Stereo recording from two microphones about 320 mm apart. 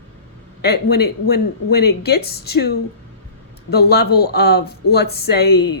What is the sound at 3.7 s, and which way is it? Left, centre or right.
Speech, left.